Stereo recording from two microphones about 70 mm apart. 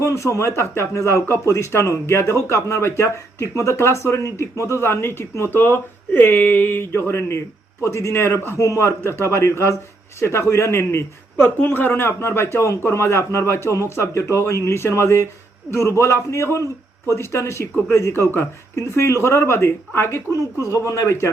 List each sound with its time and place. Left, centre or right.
0.0 s a man's voice: left
8.5 s a man's voice: left
20.7 s speech: left